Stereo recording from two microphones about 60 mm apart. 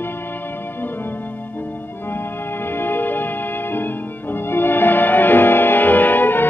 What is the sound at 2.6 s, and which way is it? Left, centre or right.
Music, left.